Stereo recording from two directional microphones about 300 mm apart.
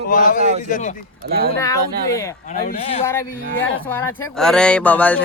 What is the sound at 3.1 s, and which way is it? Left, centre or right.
Speech, centre.